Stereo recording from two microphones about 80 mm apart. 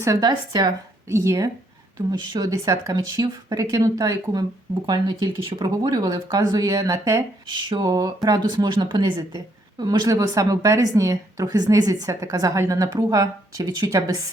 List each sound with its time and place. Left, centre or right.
0.2 s speech: right
1.0 s speech: right
2.0 s speech: right
4.9 s speech: right
5.6 s speech: right